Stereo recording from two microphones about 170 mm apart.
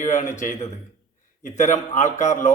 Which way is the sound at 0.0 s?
45° left (ahead or behind).